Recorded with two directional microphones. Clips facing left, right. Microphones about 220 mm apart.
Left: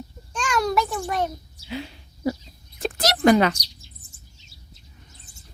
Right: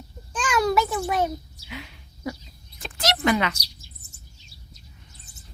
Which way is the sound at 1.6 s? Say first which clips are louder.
Left 7 dB; 30° left (ahead or behind).